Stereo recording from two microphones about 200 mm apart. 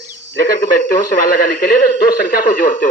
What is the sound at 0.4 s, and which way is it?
A man's voice, 45° left (ahead or behind).